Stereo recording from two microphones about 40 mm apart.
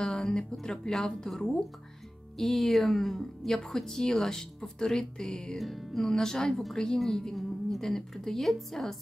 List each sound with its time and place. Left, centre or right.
0.0 s speech: centre
6.0 s speech: centre